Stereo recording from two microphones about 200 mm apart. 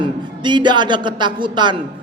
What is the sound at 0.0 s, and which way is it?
A man's voice, 20° right (ahead or behind).